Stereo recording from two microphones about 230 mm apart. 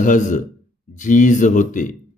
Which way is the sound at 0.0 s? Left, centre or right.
Left.